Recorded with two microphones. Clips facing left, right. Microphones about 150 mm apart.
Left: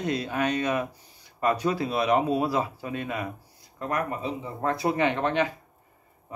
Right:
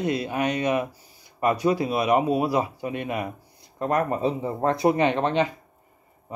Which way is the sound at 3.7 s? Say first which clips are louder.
Right 5 dB; 30° right (ahead or behind).